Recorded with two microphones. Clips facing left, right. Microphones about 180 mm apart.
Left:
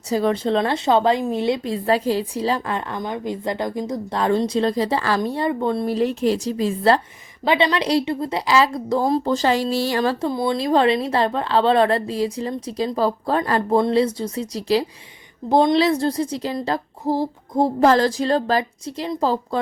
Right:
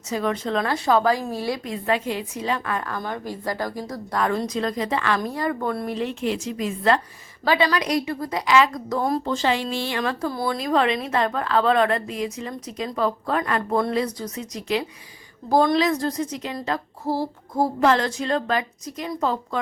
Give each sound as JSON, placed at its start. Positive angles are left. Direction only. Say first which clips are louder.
{"t": 0.1, "sound": "a woman's voice", "louder": "left 5 dB", "side_deg": 30}
{"t": 5.9, "sound": "a woman's voice", "louder": "left 6 dB", "side_deg": 40}
{"t": 17.1, "sound": "child singing", "louder": "left 4 dB", "side_deg": 15}
{"t": 17.7, "sound": "a woman's voice", "louder": "left 5 dB", "side_deg": 35}